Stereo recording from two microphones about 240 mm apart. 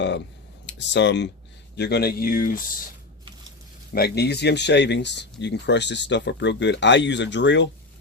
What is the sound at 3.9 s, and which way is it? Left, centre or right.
Speech, left.